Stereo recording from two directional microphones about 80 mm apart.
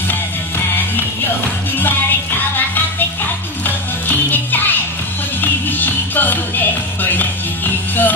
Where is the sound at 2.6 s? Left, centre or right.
Left.